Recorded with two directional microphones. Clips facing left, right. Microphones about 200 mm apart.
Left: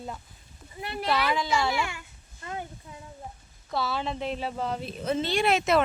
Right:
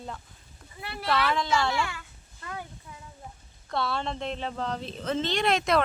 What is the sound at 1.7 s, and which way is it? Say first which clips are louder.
Speech: even; 15° left (ahead or behind).